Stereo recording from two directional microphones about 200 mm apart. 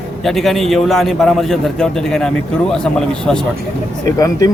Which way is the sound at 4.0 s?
15° left (ahead or behind).